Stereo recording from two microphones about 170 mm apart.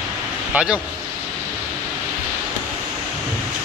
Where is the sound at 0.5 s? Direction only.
5° right (ahead or behind).